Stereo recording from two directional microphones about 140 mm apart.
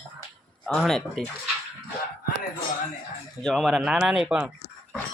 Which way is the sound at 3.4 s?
Centre (ahead or behind).